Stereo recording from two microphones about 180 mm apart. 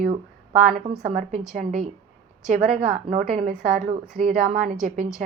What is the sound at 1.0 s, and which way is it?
Speech, 50° right (ahead or behind).